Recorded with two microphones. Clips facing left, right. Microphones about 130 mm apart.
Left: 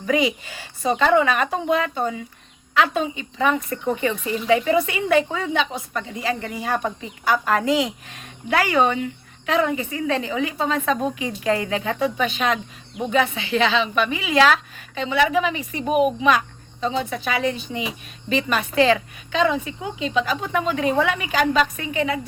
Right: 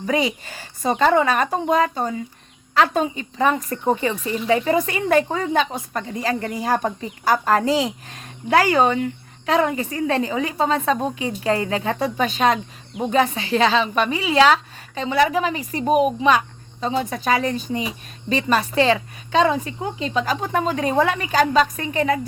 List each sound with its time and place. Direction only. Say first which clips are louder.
0.1 s a woman's voice: left 1 dB; 35° right (ahead or behind)